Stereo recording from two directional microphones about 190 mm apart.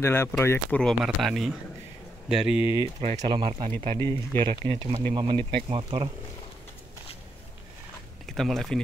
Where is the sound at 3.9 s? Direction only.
15° left (ahead or behind).